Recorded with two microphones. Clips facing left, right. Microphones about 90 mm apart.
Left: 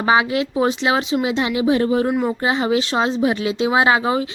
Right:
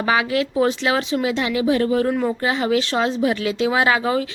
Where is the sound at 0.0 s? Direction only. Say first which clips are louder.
Left 2 dB; 25° left (ahead or behind).